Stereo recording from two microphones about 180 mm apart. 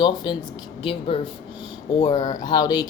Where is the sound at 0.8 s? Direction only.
30° left (ahead or behind).